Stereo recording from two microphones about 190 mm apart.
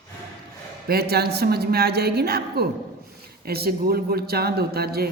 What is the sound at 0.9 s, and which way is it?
A woman's voice, 60° right (ahead or behind).